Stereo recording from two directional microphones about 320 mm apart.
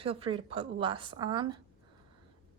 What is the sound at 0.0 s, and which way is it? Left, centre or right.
Speech, centre.